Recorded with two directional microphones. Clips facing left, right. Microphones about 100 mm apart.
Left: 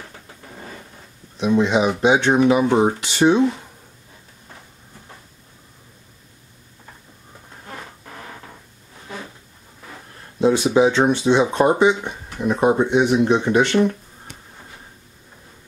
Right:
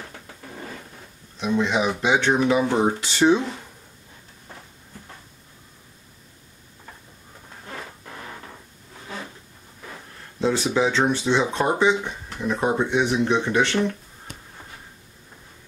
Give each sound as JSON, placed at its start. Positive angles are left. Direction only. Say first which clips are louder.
{"t": 1.4, "sound": "speech", "louder": "left 5 dB", "side_deg": 15}
{"t": 10.4, "sound": "speech", "louder": "left 6 dB", "side_deg": 15}